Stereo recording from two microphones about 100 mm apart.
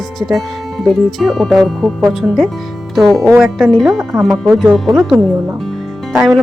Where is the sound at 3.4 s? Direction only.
5° right (ahead or behind).